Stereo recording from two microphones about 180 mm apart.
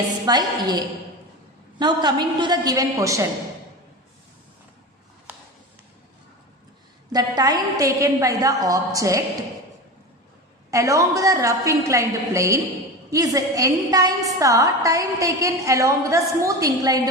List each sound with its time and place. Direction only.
0.3 s a woman's voice: 20° right (ahead or behind)
1.8 s a woman's voice: 25° right (ahead or behind)
7.1 s a woman's voice: 20° right (ahead or behind)
10.7 s a woman's voice: 15° right (ahead or behind)